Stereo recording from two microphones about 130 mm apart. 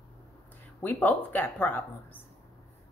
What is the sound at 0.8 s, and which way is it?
Speech, 15° left (ahead or behind).